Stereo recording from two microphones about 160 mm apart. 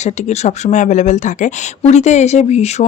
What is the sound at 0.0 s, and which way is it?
Speech, 45° left (ahead or behind).